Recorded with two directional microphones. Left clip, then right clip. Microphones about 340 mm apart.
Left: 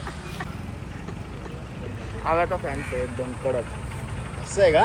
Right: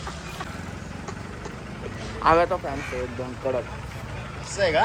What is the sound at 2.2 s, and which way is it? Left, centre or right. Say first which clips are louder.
Speech: right 4 dB; right.